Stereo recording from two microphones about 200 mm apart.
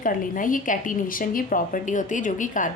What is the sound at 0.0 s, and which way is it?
A woman's voice, 40° left (ahead or behind).